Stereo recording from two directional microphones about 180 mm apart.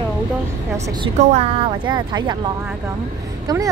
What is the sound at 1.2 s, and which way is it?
A woman's voice, 35° right (ahead or behind).